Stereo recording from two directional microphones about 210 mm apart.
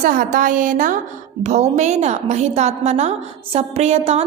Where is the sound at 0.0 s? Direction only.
40° right (ahead or behind).